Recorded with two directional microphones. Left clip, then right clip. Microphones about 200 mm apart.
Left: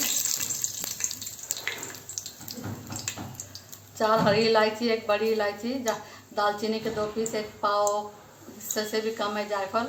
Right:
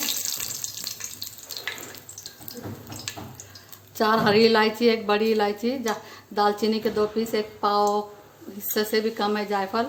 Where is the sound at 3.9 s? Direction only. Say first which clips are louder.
Right 2 dB; 60° right (ahead or behind).